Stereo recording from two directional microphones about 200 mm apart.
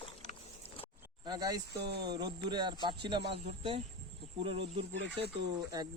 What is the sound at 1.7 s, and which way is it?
Speech, 55° right (ahead or behind).